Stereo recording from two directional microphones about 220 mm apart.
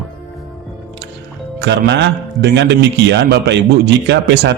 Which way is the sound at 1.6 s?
50° right (ahead or behind).